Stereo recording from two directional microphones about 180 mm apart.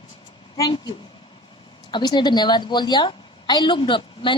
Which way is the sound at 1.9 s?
25° left (ahead or behind).